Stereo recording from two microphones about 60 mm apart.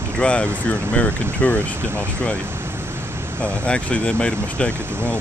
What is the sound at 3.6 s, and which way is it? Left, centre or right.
Speech, centre.